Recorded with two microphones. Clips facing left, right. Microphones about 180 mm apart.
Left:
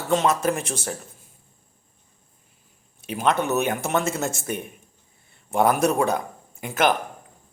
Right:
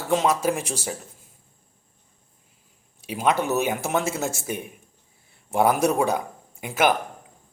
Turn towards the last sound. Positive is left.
turn(degrees=-10)  # may be behind; listen again after turning